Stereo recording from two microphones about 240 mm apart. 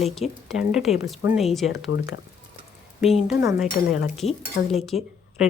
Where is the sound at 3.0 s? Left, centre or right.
Centre.